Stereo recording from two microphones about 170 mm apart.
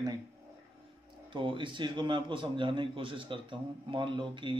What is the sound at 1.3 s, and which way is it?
A man's voice, 30° right (ahead or behind).